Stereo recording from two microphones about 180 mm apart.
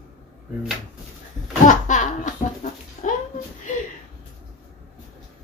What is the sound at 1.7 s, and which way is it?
Laughter, 40° left (ahead or behind).